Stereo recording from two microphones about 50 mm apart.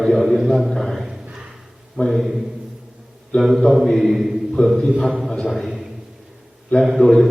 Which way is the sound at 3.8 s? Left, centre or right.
Centre.